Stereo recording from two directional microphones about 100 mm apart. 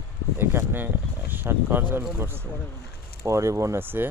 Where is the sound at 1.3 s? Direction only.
20° right (ahead or behind).